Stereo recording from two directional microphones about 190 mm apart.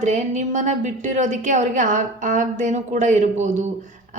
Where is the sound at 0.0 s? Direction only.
40° right (ahead or behind).